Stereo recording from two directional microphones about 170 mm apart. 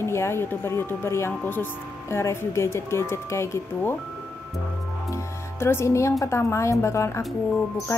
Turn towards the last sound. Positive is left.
turn(degrees=0)  # may be behind; listen again after turning